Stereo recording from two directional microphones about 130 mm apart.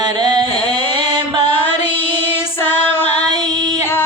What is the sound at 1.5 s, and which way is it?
Music, 15° left (ahead or behind).